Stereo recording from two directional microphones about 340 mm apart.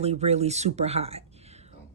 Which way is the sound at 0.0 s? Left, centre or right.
Centre.